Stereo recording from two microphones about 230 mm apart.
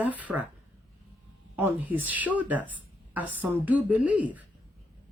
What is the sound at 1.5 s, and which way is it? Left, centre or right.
Speech, centre.